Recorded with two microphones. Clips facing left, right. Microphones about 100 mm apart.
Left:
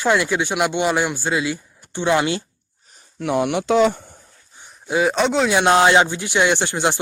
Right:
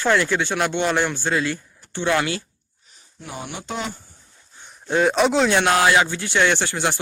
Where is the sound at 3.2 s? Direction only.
85° left.